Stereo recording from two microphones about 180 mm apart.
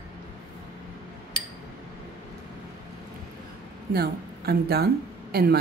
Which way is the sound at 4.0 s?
60° right (ahead or behind).